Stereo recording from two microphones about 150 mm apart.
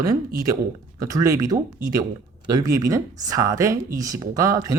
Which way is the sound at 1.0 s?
20° right (ahead or behind).